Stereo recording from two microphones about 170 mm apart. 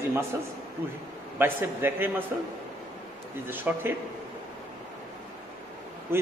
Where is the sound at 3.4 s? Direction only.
10° right (ahead or behind).